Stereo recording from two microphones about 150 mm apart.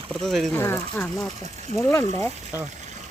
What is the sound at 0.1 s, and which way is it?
Speech, centre (ahead or behind).